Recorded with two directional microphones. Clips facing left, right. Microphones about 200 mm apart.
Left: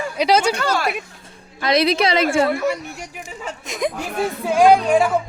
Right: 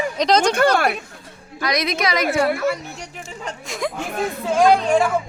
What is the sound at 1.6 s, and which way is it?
Speech, 30° left (ahead or behind).